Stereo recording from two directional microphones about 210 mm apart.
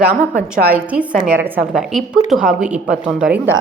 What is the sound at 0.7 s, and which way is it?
A woman's voice, 5° right (ahead or behind).